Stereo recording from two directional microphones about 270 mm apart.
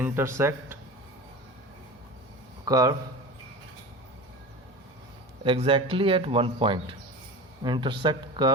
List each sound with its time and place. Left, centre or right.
0.0 s speech: centre
2.6 s speech: centre
5.4 s speech: centre